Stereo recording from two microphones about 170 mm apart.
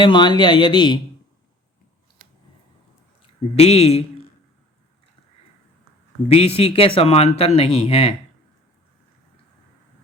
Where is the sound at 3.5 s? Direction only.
35° left (ahead or behind).